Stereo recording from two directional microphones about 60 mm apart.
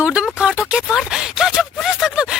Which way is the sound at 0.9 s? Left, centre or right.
Centre.